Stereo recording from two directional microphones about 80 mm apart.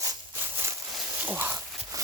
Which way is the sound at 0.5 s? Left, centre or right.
Right.